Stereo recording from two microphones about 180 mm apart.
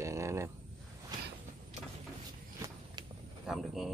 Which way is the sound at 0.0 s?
15° right (ahead or behind).